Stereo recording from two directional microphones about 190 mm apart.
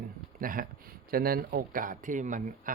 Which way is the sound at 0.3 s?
50° right (ahead or behind).